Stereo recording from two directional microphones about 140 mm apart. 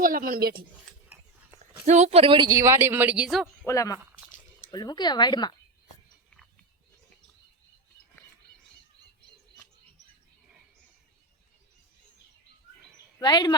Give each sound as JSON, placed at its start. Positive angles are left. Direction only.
{"t": 0.0, "sound": "a woman's voice", "side_deg": -80}
{"t": 1.1, "sound": "a sound", "side_deg": -15}
{"t": 1.9, "sound": "speech", "side_deg": -50}
{"t": 3.7, "sound": "speech", "side_deg": 25}
{"t": 13.1, "sound": "speech", "side_deg": 30}